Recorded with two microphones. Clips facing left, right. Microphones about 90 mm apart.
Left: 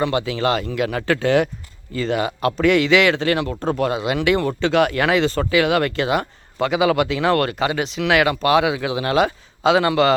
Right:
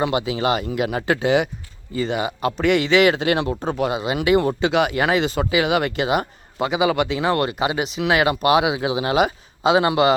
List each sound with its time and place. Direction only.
0.0 s a man's voice: 10° right (ahead or behind)
3.2 s speech: 20° right (ahead or behind)
3.6 s speech: 5° right (ahead or behind)